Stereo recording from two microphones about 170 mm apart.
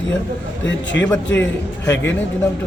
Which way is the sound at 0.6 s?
90° left.